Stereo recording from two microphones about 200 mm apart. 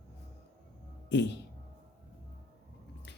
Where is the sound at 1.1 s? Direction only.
60° left (ahead or behind).